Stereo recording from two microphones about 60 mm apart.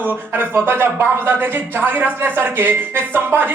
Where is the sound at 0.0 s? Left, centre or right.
Right.